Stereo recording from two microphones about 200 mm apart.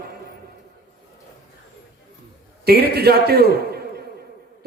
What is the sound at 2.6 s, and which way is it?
Speech, 55° right (ahead or behind).